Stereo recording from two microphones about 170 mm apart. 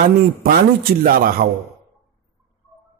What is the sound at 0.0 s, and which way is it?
Speech, 60° right (ahead or behind).